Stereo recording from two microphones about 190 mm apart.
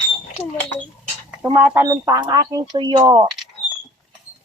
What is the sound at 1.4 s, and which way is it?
Speech, 10° right (ahead or behind).